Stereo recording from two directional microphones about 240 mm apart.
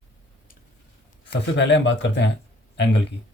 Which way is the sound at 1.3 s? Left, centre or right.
Left.